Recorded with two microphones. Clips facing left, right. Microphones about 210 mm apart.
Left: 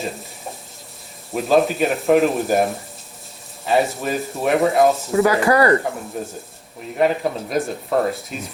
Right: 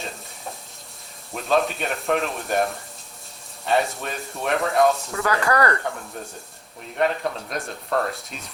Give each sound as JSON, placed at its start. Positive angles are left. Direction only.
{"t": 1.3, "sound": "speech", "side_deg": 0}
{"t": 5.1, "sound": "speech", "side_deg": 20}
{"t": 6.2, "sound": "speech", "side_deg": 5}